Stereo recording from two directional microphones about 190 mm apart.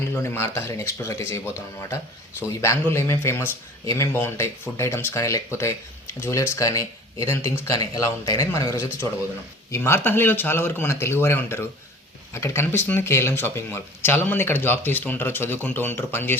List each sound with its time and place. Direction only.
0.1 s speech: 10° left (ahead or behind)
2.5 s speech: 15° left (ahead or behind)